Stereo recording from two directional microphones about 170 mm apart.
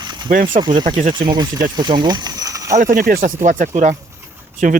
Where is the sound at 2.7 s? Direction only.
50° right (ahead or behind).